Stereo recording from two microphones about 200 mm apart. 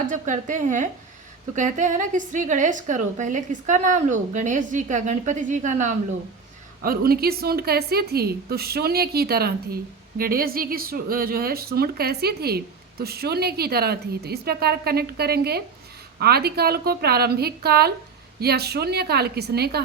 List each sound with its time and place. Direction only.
0.1 s a woman's voice: 40° right (ahead or behind)
6.8 s a woman's voice: 50° right (ahead or behind)